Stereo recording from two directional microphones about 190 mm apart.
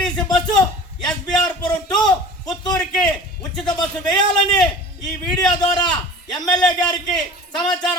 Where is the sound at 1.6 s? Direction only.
25° left (ahead or behind).